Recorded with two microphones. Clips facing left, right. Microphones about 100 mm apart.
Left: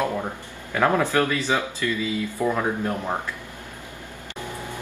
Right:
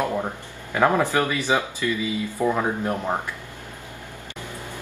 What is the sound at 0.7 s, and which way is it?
Speech, 15° right (ahead or behind).